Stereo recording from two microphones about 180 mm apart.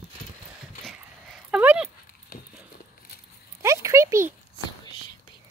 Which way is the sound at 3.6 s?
15° right (ahead or behind).